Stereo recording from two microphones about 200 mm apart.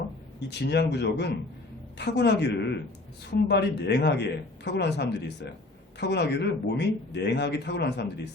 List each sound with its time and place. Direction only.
0.3 s speech: 55° left (ahead or behind)